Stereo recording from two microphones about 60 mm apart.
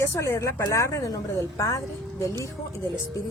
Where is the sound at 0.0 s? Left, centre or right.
Left.